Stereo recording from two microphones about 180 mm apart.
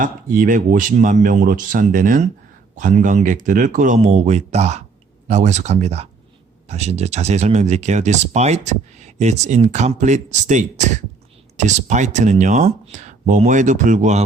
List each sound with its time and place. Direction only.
0.0 s speech: 50° right (ahead or behind)